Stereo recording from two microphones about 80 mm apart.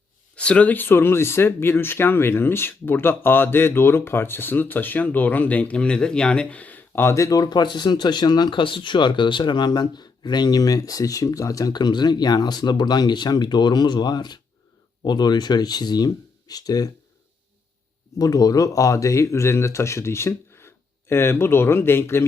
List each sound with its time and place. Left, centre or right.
0.3 s speech: centre
7.1 s speech: left
11.7 s speech: left
18.2 s speech: left